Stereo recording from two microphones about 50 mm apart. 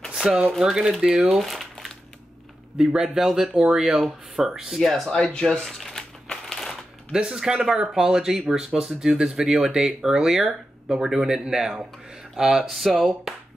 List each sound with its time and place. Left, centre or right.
0.1 s a sound: centre
0.6 s speech: centre
3.0 s speech: centre
3.8 s speech: centre
5.1 s a sound: centre
7.2 s speech: centre
12.6 s speech: centre